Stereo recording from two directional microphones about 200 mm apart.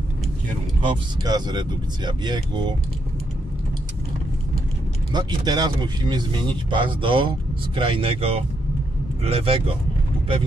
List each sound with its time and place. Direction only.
0.7 s speech: 20° right (ahead or behind)
5.1 s speech: 20° right (ahead or behind)